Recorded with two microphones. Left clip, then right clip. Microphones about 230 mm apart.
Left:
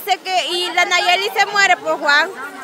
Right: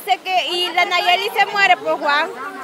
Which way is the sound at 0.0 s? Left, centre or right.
Centre.